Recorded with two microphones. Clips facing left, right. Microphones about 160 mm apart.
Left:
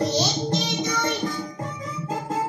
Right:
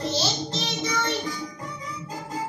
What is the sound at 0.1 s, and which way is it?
Music, 15° left (ahead or behind).